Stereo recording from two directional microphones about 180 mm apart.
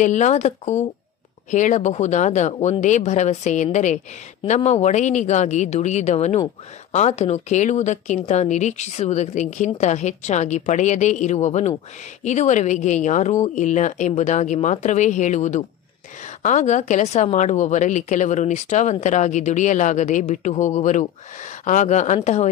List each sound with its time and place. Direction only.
0.0 s a woman's voice: 40° left (ahead or behind)